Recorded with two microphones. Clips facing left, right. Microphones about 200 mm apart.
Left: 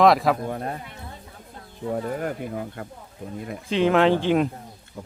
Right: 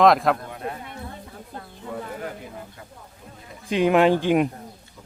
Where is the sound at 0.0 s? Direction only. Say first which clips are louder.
Even; centre (ahead or behind).